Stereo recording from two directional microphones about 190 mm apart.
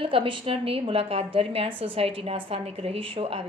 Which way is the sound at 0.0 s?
30° right (ahead or behind).